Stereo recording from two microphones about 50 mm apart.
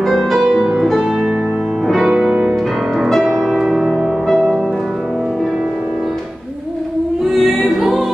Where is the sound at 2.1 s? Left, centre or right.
Right.